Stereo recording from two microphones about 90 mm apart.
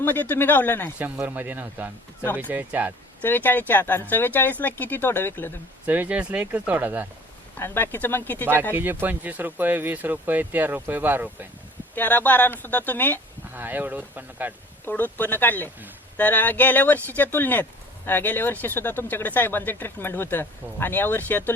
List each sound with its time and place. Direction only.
0.0 s speech: 20° left (ahead or behind)
0.9 s speech: 20° right (ahead or behind)
3.2 s speech: 20° left (ahead or behind)
5.8 s speech: 20° right (ahead or behind)
7.5 s speech: 25° left (ahead or behind)
8.7 s speech: 25° right (ahead or behind)
11.9 s speech: 20° left (ahead or behind)
13.5 s speech: 20° right (ahead or behind)
14.8 s speech: 20° left (ahead or behind)